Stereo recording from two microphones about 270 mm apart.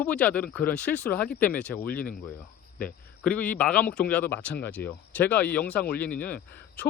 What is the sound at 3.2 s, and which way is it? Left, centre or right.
A man's voice, centre.